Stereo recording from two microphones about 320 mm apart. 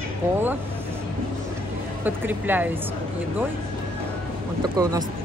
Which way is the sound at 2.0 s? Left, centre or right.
Centre.